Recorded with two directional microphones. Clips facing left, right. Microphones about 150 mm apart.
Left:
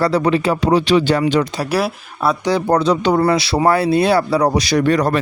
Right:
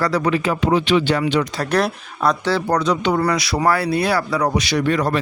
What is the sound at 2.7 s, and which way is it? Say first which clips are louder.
Speech: left 5 dB; 30° left (ahead or behind).